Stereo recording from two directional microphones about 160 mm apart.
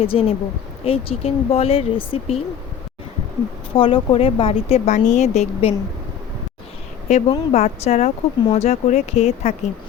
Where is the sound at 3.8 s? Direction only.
35° left (ahead or behind).